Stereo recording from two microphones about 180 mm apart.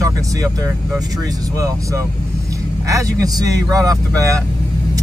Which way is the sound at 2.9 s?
20° right (ahead or behind).